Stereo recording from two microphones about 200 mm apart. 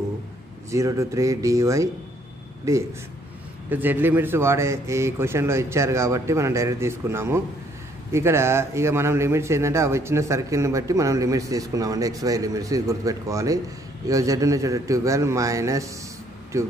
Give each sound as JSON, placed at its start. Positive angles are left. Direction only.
{"t": 0.7, "sound": "a man's voice", "side_deg": -15}